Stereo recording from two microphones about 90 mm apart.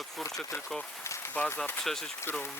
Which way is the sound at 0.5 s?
30° left (ahead or behind).